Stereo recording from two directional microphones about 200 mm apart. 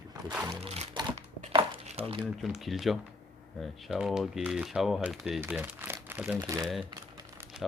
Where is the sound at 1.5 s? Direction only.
25° right (ahead or behind).